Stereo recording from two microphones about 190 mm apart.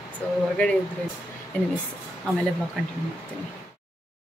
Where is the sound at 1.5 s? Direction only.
10° left (ahead or behind).